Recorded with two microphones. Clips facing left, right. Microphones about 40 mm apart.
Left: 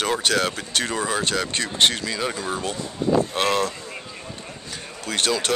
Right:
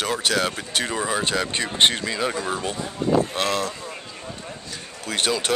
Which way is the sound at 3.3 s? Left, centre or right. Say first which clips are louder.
Left 2 dB; centre.